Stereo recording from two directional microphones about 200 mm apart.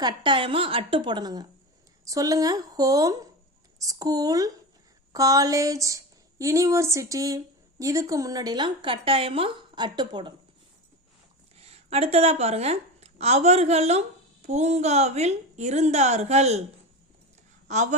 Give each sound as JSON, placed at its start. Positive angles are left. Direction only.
{"t": 0.0, "sound": "a woman's voice", "side_deg": -25}
{"t": 11.7, "sound": "a woman's voice", "side_deg": -30}
{"t": 17.7, "sound": "a woman's voice", "side_deg": -35}